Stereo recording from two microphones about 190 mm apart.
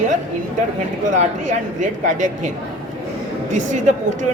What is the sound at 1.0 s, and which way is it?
Speech, 40° right (ahead or behind).